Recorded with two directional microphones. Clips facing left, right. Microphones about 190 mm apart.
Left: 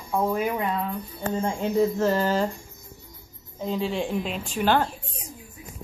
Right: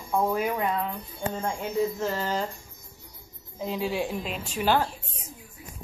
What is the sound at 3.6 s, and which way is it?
A woman's voice, 5° right (ahead or behind).